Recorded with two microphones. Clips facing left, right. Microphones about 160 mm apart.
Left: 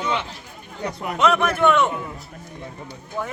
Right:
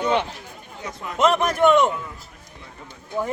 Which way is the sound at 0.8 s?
65° left (ahead or behind).